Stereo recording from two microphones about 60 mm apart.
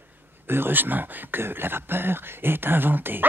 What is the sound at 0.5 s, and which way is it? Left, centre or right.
Speech, right.